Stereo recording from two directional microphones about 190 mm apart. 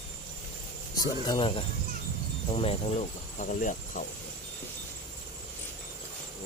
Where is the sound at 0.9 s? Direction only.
25° left (ahead or behind); by 4.0 s 45° left (ahead or behind).